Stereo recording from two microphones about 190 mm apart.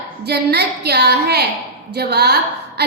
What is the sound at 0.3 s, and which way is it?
A woman's voice, 60° right (ahead or behind).